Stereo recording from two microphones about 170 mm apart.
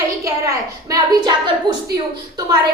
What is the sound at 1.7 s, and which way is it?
Speech, 25° right (ahead or behind).